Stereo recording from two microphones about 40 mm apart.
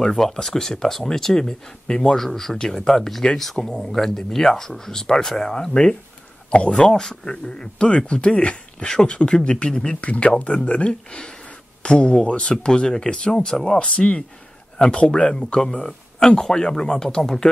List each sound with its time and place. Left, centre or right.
0.0 s speech: centre
2.1 s speech: centre; by 6.8 s left
6.8 s speech: centre
7.5 s speech: left; by 17.5 s centre